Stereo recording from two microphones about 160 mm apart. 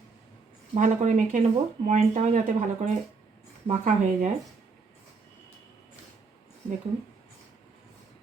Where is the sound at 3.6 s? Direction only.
50° right (ahead or behind).